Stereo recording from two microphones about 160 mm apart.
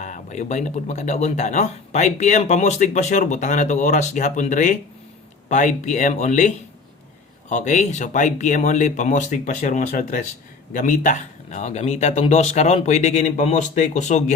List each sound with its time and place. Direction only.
0.0 s speech: 50° left (ahead or behind)
7.5 s speech: 50° left (ahead or behind)